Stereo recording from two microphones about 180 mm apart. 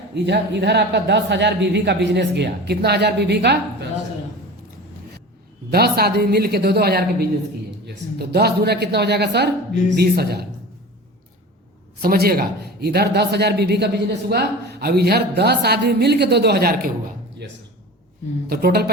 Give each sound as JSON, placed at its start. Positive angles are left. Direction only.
{"t": 0.1, "sound": "speech", "side_deg": -70}
{"t": 5.7, "sound": "a man's voice", "side_deg": -60}
{"t": 12.0, "sound": "a man's voice", "side_deg": -60}
{"t": 18.4, "sound": "a man's voice", "side_deg": -60}